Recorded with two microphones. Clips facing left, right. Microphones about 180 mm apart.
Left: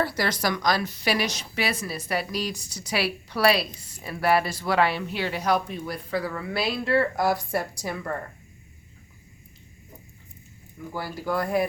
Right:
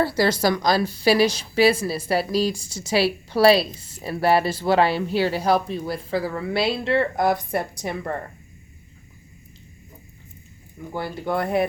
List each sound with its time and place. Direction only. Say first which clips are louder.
0.0 s speech: right 6 dB; 30° right (ahead or behind)
10.9 s speech: right 3 dB; 25° right (ahead or behind)